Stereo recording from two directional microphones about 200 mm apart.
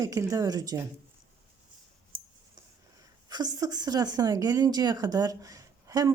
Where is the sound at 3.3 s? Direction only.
20° right (ahead or behind).